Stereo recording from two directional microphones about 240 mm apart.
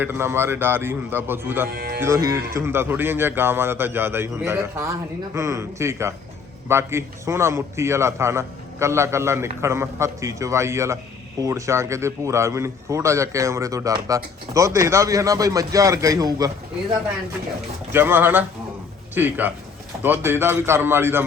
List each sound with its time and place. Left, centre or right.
0.0 s speech: centre
1.6 s speech: right
2.0 s speech: centre
17.9 s speech: centre